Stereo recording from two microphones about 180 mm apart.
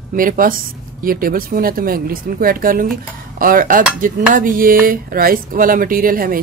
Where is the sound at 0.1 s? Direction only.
50° right (ahead or behind).